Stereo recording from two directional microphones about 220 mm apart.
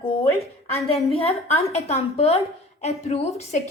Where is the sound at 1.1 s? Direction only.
25° left (ahead or behind).